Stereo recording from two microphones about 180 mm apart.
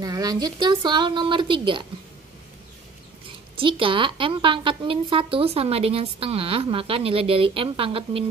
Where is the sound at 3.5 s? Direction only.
30° right (ahead or behind).